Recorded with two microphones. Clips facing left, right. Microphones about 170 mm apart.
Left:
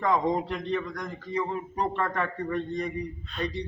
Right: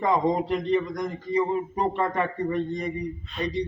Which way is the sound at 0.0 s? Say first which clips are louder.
Right 2 dB; 15° right (ahead or behind).